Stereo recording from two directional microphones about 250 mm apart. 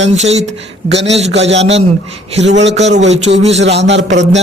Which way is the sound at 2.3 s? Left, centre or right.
Right.